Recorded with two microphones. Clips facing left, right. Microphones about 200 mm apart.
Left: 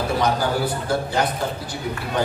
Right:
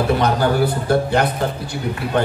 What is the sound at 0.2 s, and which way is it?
A man's voice, 60° right (ahead or behind).